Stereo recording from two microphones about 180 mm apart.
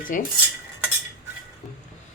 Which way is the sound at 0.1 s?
50° left (ahead or behind).